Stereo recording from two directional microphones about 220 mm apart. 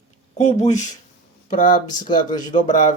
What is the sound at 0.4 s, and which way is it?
Speech, 30° left (ahead or behind).